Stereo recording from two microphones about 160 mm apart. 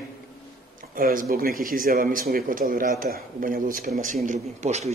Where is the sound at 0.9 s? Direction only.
60° right (ahead or behind).